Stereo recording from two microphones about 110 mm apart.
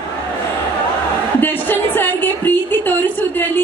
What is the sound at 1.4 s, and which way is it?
Speech, 15° left (ahead or behind).